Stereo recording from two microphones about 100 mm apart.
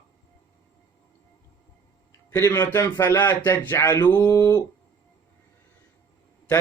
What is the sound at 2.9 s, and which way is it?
Speech, 40° left (ahead or behind).